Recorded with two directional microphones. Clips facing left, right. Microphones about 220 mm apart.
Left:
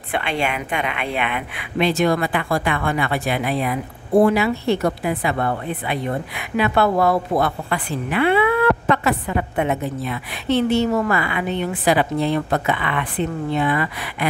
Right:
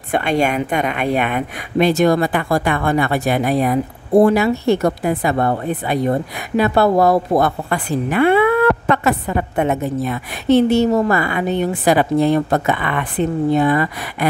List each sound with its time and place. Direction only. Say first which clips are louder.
0.1 s a woman's voice: right 6 dB; 45° right (ahead or behind)